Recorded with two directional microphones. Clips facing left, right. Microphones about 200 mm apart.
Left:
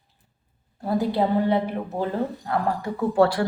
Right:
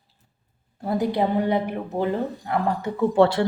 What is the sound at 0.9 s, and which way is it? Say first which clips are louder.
A woman's voice: even; 15° right (ahead or behind).